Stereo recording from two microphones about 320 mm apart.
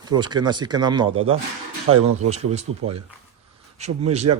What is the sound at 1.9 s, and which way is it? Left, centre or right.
Speech, right.